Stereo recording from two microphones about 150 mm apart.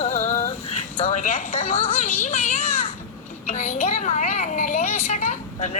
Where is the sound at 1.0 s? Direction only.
55° left (ahead or behind).